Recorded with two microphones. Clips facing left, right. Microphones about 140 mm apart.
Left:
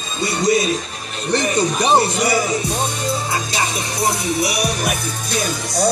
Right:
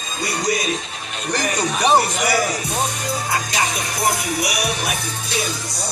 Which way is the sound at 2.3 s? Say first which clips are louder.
Left 2 dB; 25° left (ahead or behind).